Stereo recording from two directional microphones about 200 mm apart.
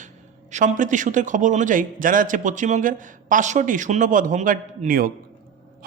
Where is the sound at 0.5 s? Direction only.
40° right (ahead or behind).